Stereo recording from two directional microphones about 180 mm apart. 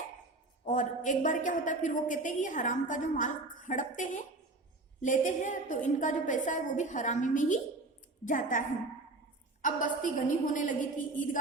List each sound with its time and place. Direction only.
0.6 s a woman's voice: 45° left (ahead or behind)